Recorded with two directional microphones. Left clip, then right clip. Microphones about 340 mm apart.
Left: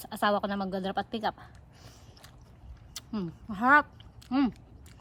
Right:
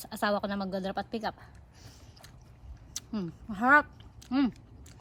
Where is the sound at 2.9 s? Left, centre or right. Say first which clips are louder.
Even; centre.